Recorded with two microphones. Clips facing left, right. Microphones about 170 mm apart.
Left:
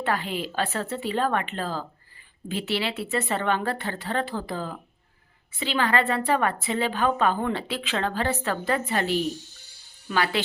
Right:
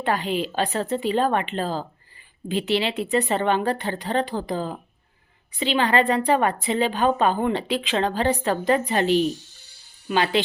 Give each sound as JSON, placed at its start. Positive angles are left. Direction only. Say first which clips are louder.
{"t": 0.0, "sound": "a woman's voice", "louder": "right 4 dB", "side_deg": -20}